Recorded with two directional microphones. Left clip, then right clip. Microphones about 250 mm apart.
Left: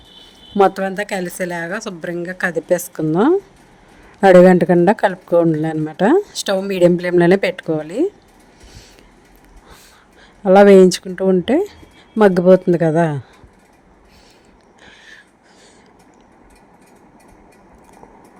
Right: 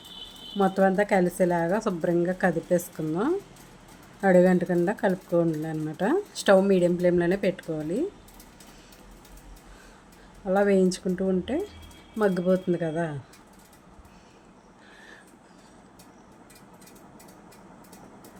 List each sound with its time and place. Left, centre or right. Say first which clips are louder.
0.5 s speech: left 8 dB; left
10.4 s speech: left 15 dB; left
14.8 s a sound: left 8 dB; left